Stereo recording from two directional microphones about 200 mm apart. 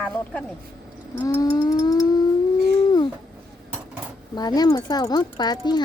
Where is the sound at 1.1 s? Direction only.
10° left (ahead or behind).